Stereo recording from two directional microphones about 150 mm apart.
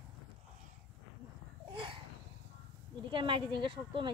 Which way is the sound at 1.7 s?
35° right (ahead or behind).